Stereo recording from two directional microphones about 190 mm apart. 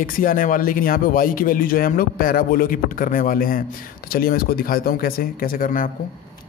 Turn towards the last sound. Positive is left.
turn(degrees=45)  # may be behind; listen again after turning